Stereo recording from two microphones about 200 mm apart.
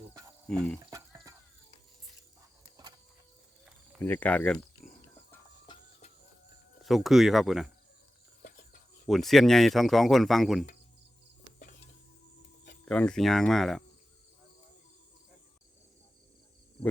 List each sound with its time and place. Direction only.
0.4 s speech: 5° left (ahead or behind)
0.8 s livestock: 15° right (ahead or behind)
4.0 s speech: 10° left (ahead or behind)
6.8 s speech: centre (ahead or behind)
8.4 s a sound: 45° left (ahead or behind)
9.0 s speech: centre (ahead or behind)
12.8 s speech: 5° left (ahead or behind)
16.8 s a sound: 25° left (ahead or behind)